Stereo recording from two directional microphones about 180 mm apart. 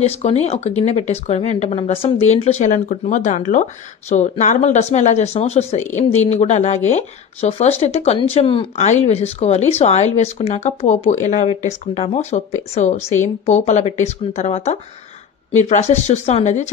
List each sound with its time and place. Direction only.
0.0 s speech: 35° left (ahead or behind)